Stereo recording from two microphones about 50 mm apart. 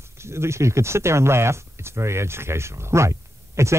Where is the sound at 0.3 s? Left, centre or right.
Right.